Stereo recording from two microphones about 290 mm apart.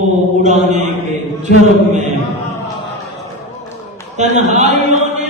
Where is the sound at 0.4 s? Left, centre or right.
Right.